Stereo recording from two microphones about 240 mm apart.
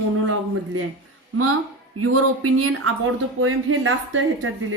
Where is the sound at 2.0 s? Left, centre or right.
Right.